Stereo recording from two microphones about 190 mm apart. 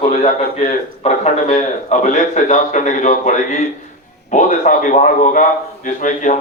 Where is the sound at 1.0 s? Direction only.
40° left (ahead or behind).